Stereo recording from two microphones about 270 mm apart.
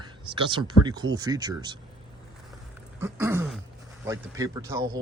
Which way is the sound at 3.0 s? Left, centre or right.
Centre.